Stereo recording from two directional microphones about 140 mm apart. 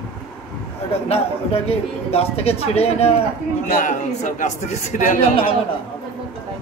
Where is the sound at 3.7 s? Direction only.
70° left (ahead or behind).